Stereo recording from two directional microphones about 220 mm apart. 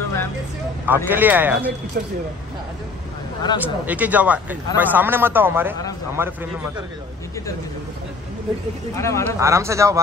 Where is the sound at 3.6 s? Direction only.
5° right (ahead or behind).